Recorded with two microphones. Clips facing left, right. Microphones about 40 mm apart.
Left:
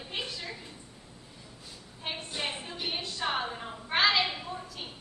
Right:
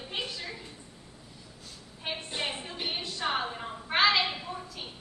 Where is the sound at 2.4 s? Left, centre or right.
Centre.